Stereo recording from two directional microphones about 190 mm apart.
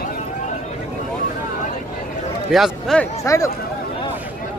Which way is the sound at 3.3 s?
15° left (ahead or behind).